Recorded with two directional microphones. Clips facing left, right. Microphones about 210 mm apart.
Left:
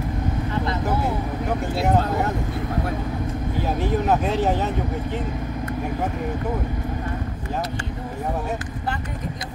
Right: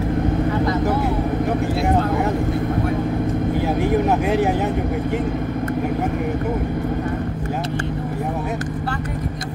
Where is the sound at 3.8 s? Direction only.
10° right (ahead or behind).